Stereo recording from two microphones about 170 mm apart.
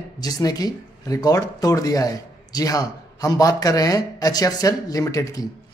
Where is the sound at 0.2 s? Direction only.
20° left (ahead or behind).